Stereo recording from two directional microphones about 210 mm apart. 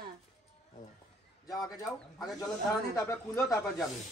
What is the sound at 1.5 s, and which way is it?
Speech, 15° left (ahead or behind).